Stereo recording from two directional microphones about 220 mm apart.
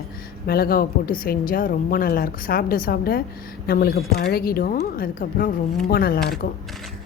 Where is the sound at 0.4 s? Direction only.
45° left (ahead or behind).